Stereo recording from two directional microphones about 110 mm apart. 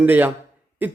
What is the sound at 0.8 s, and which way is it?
Cough, 15° right (ahead or behind).